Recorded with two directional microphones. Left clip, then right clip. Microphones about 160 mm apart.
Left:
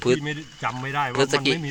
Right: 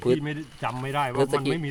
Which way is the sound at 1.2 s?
10° right (ahead or behind).